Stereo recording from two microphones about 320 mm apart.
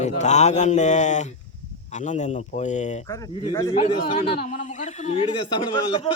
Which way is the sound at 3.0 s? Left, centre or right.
Centre.